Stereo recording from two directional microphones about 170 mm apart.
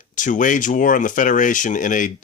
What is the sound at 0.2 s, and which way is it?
Speech, 50° left (ahead or behind).